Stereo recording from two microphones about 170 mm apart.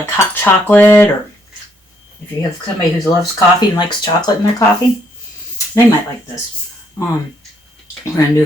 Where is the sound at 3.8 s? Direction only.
25° left (ahead or behind).